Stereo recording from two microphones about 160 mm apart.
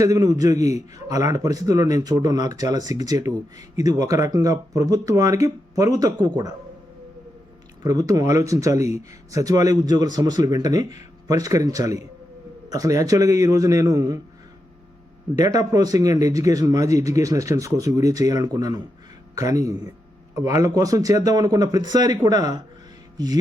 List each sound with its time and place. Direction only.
0.0 s speech: 20° right (ahead or behind)
7.8 s speech: 20° right (ahead or behind)
15.4 s speech: 25° right (ahead or behind)
23.1 s music: 25° right (ahead or behind)